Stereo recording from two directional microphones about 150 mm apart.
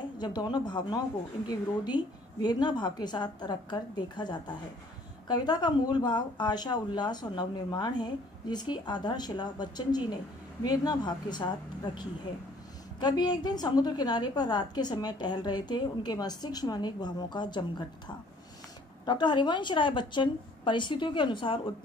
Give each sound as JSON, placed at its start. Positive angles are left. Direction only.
{"t": 0.2, "sound": "a woman's voice", "side_deg": 30}
{"t": 13.0, "sound": "a woman's voice", "side_deg": 30}